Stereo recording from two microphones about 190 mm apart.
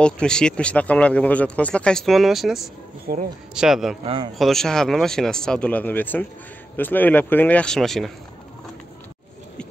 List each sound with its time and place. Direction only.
0.0 s speech: 5° left (ahead or behind)
3.1 s speech: 45° right (ahead or behind)
3.5 s speech: centre (ahead or behind)
4.0 s speech: 30° right (ahead or behind)
4.4 s speech: centre (ahead or behind)